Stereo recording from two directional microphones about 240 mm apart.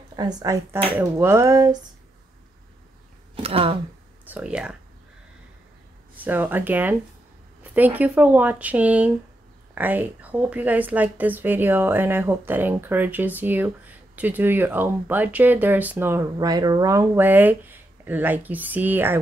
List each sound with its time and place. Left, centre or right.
0.4 s speech: centre
3.4 s speech: right
4.3 s speech: centre
6.1 s speech: centre